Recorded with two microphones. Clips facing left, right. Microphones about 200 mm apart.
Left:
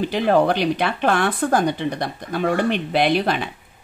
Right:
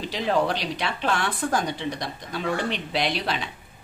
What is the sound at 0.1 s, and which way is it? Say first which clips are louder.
Speech: left 5 dB; 55° left (ahead or behind).